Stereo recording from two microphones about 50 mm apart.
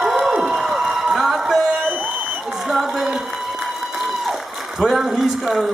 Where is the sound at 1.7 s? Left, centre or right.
Right.